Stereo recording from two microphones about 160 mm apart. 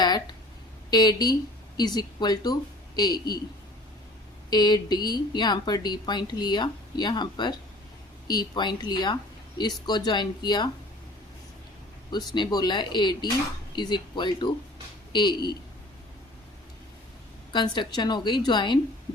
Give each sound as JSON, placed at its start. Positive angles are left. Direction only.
{"t": 0.9, "sound": "speech", "side_deg": 25}
{"t": 4.4, "sound": "speech", "side_deg": 25}
{"t": 12.1, "sound": "speech", "side_deg": 25}
{"t": 17.5, "sound": "speech", "side_deg": 30}